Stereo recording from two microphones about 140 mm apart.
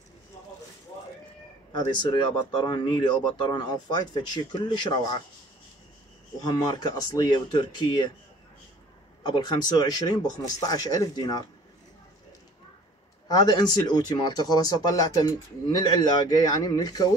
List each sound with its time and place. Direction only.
1.7 s speech: 35° left (ahead or behind)
6.4 s speech: 30° left (ahead or behind)
9.2 s speech: 30° left (ahead or behind)
13.3 s speech: 30° left (ahead or behind)